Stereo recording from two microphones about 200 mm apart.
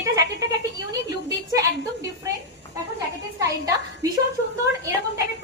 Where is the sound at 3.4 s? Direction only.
15° right (ahead or behind).